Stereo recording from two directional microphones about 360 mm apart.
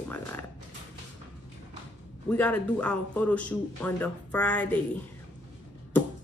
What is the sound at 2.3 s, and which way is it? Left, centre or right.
A woman's voice, centre.